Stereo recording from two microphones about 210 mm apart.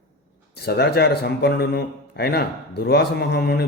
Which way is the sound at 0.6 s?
50° left (ahead or behind).